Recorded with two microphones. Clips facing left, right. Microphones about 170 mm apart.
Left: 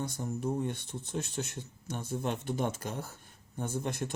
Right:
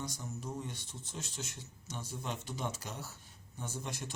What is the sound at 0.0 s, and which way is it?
Speech, 55° left (ahead or behind).